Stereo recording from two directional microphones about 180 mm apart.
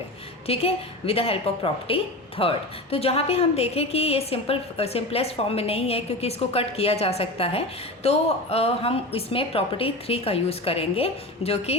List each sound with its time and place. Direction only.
0.4 s a woman's voice: 35° left (ahead or behind)